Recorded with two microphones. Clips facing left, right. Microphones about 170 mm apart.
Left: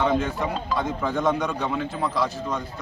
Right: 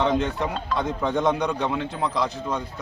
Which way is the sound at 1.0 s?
20° right (ahead or behind).